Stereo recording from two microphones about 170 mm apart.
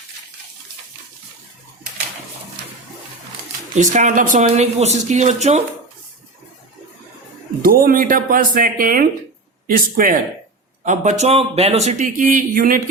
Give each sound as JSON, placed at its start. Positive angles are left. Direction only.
{"t": 3.8, "sound": "speech", "side_deg": -45}
{"t": 4.4, "sound": "speech", "side_deg": -40}
{"t": 7.6, "sound": "speech", "side_deg": -60}